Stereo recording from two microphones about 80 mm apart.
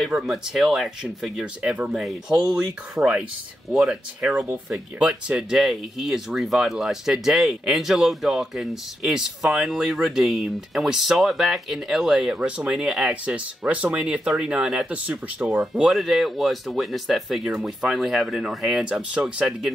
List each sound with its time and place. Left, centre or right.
0.0 s speech: centre
1.6 s speech: centre
5.6 s speech: centre
15.6 s speech: centre